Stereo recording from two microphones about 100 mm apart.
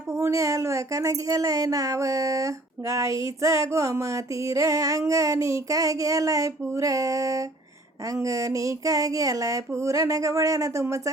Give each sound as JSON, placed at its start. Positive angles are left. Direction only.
{"t": 0.2, "sound": "music", "side_deg": -30}